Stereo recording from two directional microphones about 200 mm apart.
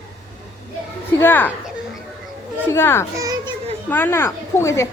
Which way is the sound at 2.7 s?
10° left (ahead or behind).